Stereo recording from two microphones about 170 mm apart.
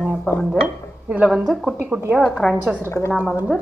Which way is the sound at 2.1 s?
Centre (ahead or behind).